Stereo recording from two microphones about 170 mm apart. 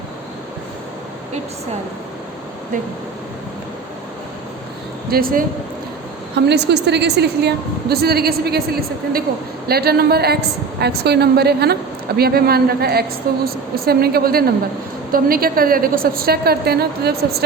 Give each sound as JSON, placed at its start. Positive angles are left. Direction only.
{"t": 5.1, "sound": "a woman's voice", "side_deg": -55}
{"t": 6.3, "sound": "a woman's voice", "side_deg": -80}